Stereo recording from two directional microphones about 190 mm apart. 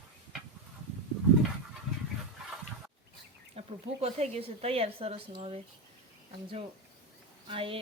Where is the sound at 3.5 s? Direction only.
35° right (ahead or behind).